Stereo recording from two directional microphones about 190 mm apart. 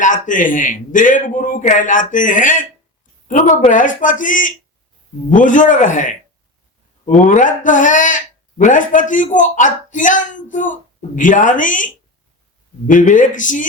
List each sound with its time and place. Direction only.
0.0 s speech: 45° left (ahead or behind)
12.9 s speech: 45° left (ahead or behind)